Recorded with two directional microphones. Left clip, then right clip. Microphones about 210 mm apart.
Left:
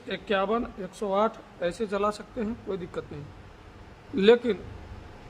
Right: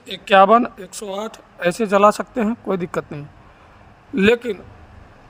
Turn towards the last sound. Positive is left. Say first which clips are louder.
# right 3 dB
turn(degrees=-35)  # may be behind; listen again after turning